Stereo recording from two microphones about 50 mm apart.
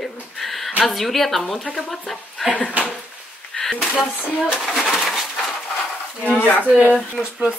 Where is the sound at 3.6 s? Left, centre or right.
Centre.